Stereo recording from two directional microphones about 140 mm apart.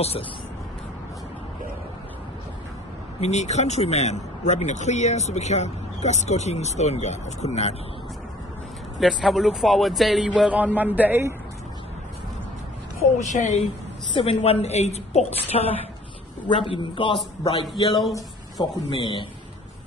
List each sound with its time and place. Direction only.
3.2 s speech: 55° left (ahead or behind)
9.0 s a man's voice: centre (ahead or behind)
13.3 s a woman's voice: 55° left (ahead or behind)
16.4 s a man's voice: 35° left (ahead or behind)